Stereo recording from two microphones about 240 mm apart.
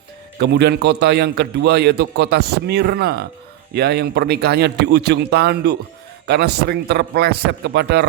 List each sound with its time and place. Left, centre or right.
0.3 s a man's voice: right